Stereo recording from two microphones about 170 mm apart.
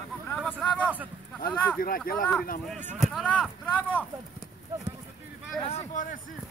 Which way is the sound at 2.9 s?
Centre (ahead or behind).